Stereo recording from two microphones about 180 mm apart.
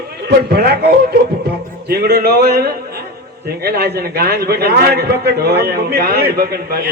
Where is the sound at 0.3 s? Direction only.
60° right (ahead or behind).